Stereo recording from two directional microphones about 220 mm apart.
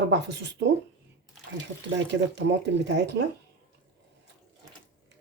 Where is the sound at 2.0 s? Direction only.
55° right (ahead or behind).